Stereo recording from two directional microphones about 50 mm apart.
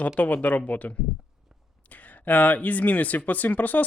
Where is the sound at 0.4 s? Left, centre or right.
Left.